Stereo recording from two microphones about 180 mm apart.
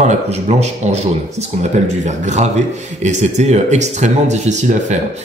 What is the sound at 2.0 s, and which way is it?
A man's voice, 40° right (ahead or behind).